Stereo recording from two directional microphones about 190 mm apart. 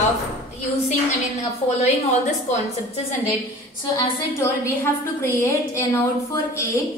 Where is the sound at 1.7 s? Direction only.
35° left (ahead or behind).